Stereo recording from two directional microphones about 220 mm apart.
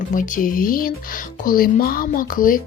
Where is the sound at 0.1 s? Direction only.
35° left (ahead or behind).